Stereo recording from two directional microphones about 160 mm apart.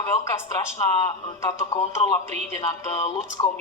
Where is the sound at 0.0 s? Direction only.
15° left (ahead or behind).